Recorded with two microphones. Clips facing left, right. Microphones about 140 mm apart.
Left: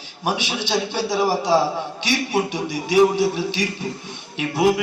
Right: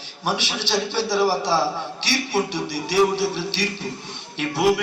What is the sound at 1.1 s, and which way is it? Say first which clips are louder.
Speech: even; 20° left (ahead or behind).